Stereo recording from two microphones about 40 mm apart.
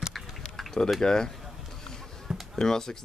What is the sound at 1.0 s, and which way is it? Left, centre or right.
Speech, centre.